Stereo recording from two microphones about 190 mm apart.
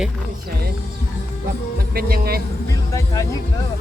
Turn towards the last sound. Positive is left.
turn(degrees=15)  # may be behind; listen again after turning